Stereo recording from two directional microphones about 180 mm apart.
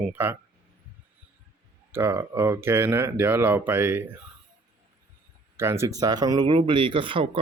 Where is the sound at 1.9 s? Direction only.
15° right (ahead or behind).